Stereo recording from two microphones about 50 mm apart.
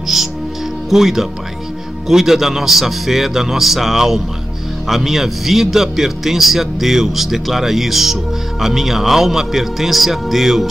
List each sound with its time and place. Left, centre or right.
0.1 s music: centre
0.8 s speech: centre